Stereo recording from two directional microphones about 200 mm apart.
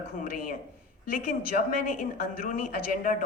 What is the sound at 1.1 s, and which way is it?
A woman's voice, 45° left (ahead or behind).